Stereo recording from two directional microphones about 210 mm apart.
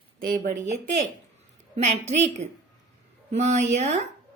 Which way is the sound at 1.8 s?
30° right (ahead or behind).